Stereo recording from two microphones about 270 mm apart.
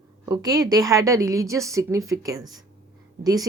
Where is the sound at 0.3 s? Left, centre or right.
Centre.